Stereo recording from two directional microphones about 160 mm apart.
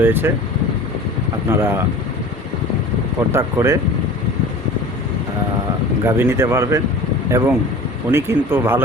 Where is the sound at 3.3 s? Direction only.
15° right (ahead or behind).